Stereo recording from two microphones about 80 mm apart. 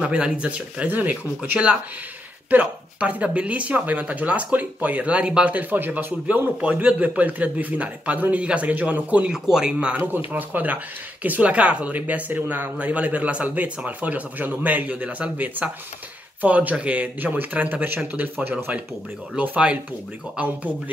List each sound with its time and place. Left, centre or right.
0.0 s speech: centre
9.9 s speech: right